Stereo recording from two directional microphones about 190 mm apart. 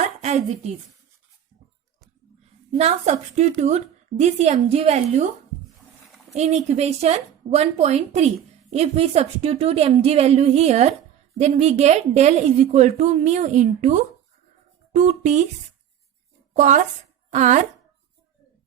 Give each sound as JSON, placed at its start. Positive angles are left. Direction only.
{"t": 0.2, "sound": "a woman's voice", "side_deg": -35}
{"t": 2.7, "sound": "a woman's voice", "side_deg": -35}
{"t": 6.3, "sound": "a woman's voice", "side_deg": -35}
{"t": 16.6, "sound": "a woman's voice", "side_deg": -40}